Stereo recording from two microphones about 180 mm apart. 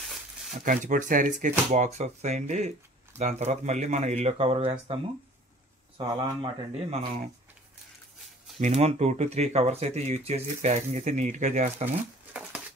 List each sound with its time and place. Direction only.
0.7 s speech: 45° right (ahead or behind)
5.9 s speech: 30° right (ahead or behind)
8.5 s speech: 40° right (ahead or behind)